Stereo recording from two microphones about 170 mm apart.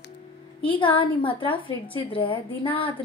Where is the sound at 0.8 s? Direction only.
30° left (ahead or behind).